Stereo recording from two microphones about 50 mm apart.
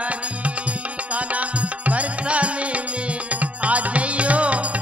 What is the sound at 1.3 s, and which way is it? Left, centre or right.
Music, right.